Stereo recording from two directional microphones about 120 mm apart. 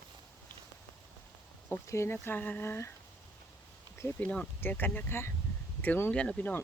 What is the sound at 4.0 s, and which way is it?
Speech, 10° left (ahead or behind).